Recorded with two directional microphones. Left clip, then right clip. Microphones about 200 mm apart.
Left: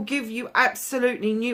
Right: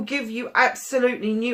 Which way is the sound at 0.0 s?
50° left (ahead or behind).